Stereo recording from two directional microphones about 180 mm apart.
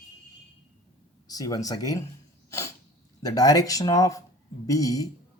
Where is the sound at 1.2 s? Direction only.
20° left (ahead or behind).